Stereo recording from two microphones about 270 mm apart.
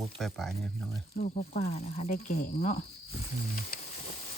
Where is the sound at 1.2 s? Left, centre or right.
Left.